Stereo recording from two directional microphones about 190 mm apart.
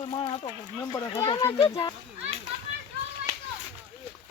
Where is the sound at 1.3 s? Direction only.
20° left (ahead or behind).